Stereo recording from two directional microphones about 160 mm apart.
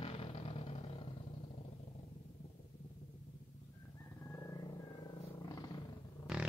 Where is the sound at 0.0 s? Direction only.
35° left (ahead or behind).